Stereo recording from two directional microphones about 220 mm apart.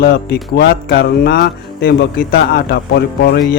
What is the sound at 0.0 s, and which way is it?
Speech, 45° left (ahead or behind).